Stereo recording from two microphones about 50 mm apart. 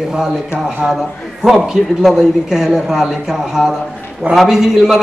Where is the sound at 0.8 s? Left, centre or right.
Right.